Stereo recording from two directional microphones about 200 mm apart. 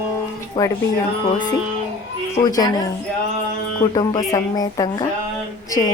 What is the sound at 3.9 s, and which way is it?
A woman's voice, 15° left (ahead or behind).